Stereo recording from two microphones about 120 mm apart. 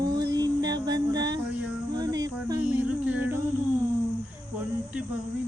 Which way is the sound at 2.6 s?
15° right (ahead or behind).